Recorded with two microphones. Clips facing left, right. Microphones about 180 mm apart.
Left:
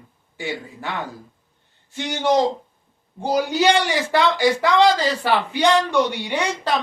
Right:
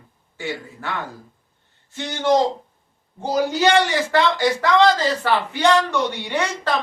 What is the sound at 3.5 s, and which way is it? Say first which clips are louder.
Speech: right 2 dB; 15° left (ahead or behind).